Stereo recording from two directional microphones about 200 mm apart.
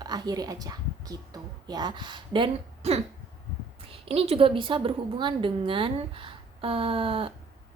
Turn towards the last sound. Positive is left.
turn(degrees=-25)  # may be behind; listen again after turning